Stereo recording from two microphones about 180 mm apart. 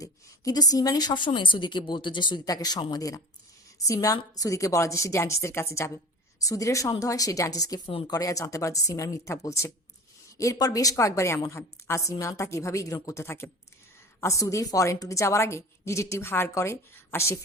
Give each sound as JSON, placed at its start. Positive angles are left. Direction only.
{"t": 0.0, "sound": "a woman's voice", "side_deg": 20}